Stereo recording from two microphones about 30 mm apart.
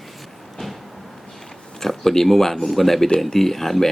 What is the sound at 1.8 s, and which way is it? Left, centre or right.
Speech, centre.